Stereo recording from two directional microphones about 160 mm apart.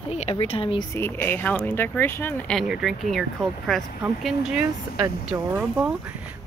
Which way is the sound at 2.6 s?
Centre (ahead or behind).